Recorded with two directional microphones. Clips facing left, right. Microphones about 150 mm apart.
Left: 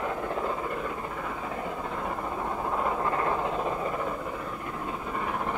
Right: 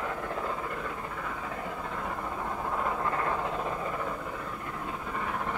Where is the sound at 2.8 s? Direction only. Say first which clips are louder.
Left 3 dB; 25° left (ahead or behind).